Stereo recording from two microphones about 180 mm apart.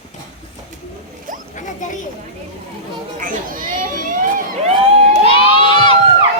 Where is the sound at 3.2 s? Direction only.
50° right (ahead or behind).